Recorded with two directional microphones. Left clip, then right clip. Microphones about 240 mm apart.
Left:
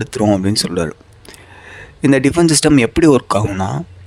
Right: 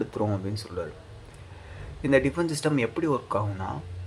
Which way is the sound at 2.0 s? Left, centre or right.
Left.